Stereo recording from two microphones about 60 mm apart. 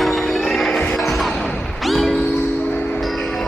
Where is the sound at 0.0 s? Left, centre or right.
Centre.